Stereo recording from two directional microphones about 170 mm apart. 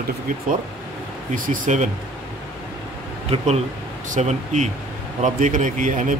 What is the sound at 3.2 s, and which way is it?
A man's voice, 35° right (ahead or behind).